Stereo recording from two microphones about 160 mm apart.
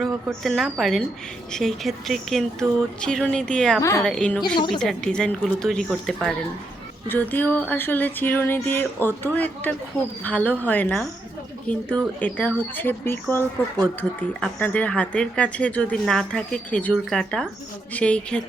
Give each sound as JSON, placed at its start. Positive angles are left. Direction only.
{"t": 0.0, "sound": "speech", "side_deg": 0}
{"t": 3.8, "sound": "a woman's voice", "side_deg": 20}
{"t": 4.0, "sound": "speech", "side_deg": 5}
{"t": 4.4, "sound": "speech", "side_deg": 30}
{"t": 4.8, "sound": "speech", "side_deg": 5}
{"t": 7.1, "sound": "a woman's voice", "side_deg": 10}
{"t": 14.6, "sound": "a woman's voice", "side_deg": 10}